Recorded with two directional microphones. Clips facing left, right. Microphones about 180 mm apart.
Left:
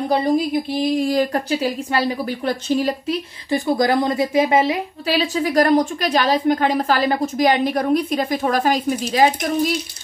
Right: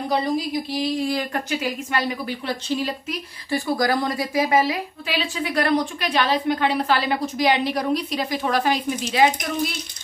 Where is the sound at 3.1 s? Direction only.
20° left (ahead or behind).